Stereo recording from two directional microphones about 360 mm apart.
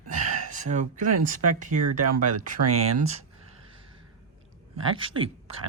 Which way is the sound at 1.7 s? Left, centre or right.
Right.